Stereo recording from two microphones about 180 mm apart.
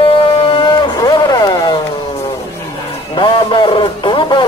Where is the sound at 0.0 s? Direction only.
30° left (ahead or behind).